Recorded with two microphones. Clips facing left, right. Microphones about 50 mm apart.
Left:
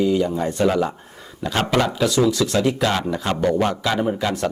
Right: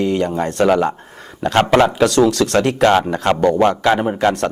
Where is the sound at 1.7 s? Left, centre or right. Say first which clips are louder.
Right 6 dB; right.